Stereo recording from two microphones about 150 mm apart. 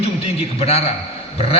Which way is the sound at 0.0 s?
45° left (ahead or behind).